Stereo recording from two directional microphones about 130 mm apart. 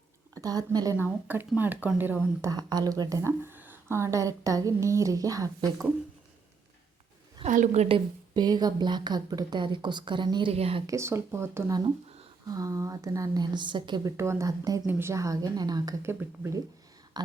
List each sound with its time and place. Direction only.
0.3 s speech: 30° right (ahead or behind)
0.9 s speech: 15° right (ahead or behind)
2.4 s a woman's voice: 30° right (ahead or behind)
7.4 s a woman's voice: 70° right (ahead or behind)
7.9 s a woman's voice: 35° right (ahead or behind)
10.5 s speech: 50° right (ahead or behind)
10.8 s a woman's voice: 20° right (ahead or behind); by 14.1 s 35° right (ahead or behind)
14.2 s a woman's voice: 20° right (ahead or behind)
14.8 s a woman's voice: 15° right (ahead or behind)
16.0 s a woman's voice: 20° right (ahead or behind)
17.2 s a sound: 30° right (ahead or behind)